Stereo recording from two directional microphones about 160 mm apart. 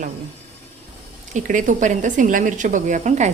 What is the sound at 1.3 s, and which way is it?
Speech, 50° right (ahead or behind).